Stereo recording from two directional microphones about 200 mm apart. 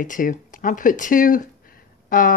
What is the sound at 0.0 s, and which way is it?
Cutlery, 40° left (ahead or behind).